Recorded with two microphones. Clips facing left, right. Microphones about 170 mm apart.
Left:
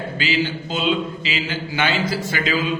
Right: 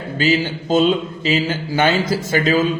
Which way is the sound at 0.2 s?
45° right (ahead or behind).